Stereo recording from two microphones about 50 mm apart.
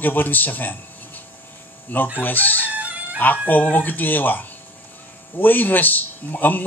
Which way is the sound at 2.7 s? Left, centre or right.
Right.